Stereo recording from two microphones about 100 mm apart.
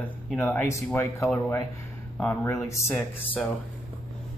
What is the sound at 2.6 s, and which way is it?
Speech, 30° left (ahead or behind).